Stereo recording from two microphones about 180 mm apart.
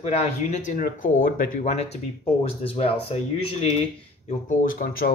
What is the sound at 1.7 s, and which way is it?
Speech, 35° left (ahead or behind).